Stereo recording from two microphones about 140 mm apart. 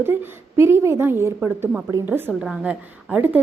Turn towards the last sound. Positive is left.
turn(degrees=-10)  # may be behind; listen again after turning